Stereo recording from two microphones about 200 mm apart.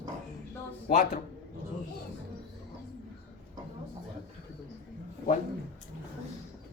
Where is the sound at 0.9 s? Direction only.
40° left (ahead or behind).